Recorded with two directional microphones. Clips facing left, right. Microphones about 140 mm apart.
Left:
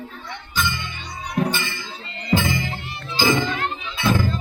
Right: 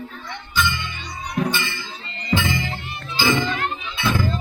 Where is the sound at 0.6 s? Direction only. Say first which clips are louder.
Right 2 dB; 40° left (ahead or behind).